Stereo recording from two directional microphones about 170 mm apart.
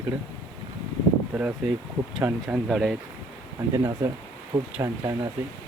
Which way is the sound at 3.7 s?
20° right (ahead or behind).